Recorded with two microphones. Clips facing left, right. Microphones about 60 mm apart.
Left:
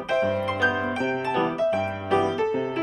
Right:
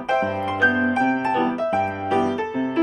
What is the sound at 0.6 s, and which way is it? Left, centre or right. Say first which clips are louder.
Music: right 8 dB; right.